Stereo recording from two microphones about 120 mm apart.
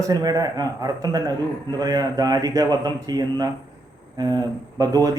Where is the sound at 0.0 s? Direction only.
30° right (ahead or behind).